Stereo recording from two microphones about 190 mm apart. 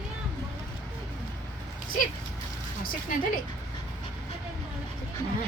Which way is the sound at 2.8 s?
50° left (ahead or behind).